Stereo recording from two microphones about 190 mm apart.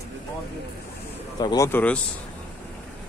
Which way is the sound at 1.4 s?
20° left (ahead or behind).